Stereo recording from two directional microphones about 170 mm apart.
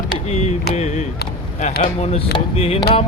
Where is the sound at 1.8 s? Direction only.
40° left (ahead or behind).